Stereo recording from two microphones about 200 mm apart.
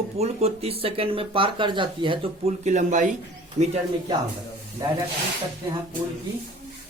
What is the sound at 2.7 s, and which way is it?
Speech, 35° right (ahead or behind).